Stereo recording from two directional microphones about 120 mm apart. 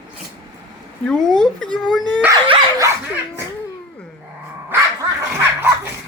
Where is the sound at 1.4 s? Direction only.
5° left (ahead or behind).